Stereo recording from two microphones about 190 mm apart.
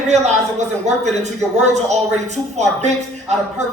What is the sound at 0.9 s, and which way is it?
A woman's voice, 35° right (ahead or behind).